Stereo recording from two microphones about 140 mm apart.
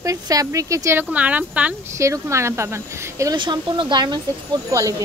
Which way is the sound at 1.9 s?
20° right (ahead or behind).